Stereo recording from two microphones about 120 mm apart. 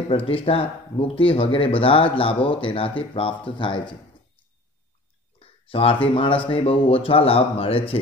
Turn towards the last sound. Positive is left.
turn(degrees=50)  # may be behind; listen again after turning